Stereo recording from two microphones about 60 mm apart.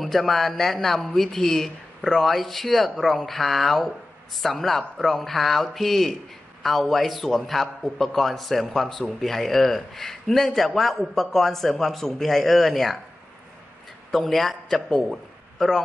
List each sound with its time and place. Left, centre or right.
0.0 s a man's voice: centre
14.2 s a man's voice: centre